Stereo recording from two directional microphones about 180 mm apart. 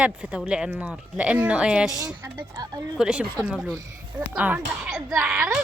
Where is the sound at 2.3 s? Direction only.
20° right (ahead or behind).